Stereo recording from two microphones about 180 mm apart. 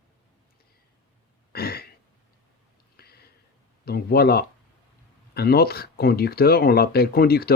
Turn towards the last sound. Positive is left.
turn(degrees=60)  # may be behind; listen again after turning